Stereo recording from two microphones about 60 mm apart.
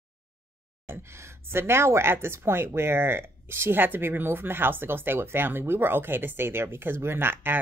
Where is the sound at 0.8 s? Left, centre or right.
Right.